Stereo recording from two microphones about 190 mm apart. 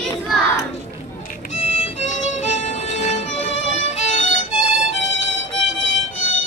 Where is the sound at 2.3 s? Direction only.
35° left (ahead or behind).